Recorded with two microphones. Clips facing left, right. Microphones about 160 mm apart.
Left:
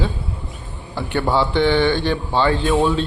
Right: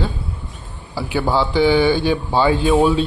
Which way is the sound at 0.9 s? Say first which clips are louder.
Even; 5° right (ahead or behind).